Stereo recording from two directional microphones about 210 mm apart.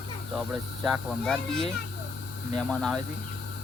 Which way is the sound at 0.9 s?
Centre (ahead or behind).